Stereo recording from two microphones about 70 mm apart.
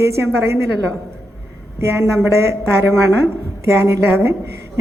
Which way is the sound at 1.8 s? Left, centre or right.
Right.